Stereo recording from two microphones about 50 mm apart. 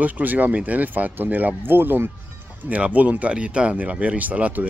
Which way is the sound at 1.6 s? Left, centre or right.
Right.